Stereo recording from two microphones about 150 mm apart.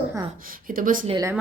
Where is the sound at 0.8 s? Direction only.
65° right (ahead or behind).